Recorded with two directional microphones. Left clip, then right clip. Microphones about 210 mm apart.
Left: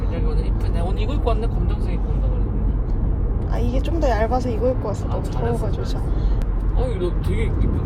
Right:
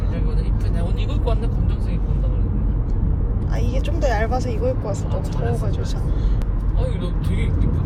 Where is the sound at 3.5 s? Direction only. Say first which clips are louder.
Left 3 dB; 15° left (ahead or behind).